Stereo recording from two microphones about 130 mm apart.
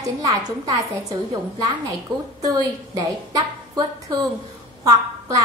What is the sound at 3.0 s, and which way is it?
A woman's voice, 35° right (ahead or behind).